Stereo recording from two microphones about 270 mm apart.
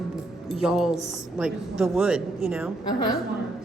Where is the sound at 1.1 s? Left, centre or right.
Centre.